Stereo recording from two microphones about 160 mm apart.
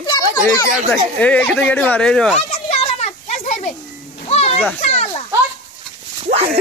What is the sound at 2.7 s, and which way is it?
Children playing, 45° left (ahead or behind).